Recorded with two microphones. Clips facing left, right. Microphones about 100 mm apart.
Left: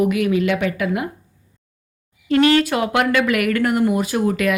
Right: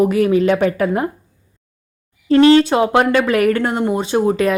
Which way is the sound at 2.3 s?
30° right (ahead or behind).